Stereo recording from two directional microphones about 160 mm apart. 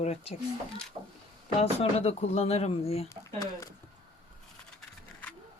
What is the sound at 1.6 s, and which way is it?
Speech, 40° left (ahead or behind).